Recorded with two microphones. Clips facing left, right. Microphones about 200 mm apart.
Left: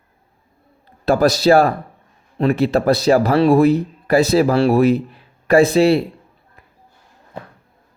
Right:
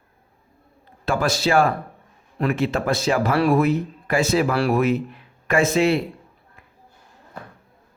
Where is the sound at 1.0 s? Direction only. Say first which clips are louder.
Left 8 dB; 40° left (ahead or behind).